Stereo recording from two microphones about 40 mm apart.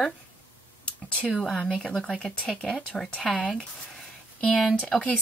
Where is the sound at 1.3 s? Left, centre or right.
Centre.